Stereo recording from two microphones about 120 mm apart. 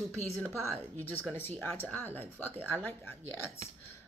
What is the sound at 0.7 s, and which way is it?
Speech, 15° left (ahead or behind).